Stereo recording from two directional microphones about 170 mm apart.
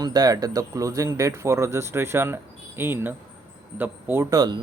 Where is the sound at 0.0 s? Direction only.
25° right (ahead or behind).